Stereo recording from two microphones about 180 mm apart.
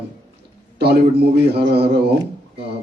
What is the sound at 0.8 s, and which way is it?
Speech, 65° right (ahead or behind).